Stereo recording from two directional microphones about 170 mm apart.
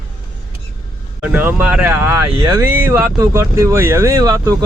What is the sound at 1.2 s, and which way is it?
Speech, 10° right (ahead or behind).